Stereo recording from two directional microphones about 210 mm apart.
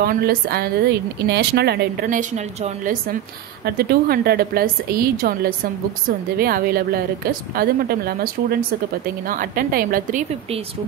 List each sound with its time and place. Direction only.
0.0 s a woman's voice: 45° right (ahead or behind)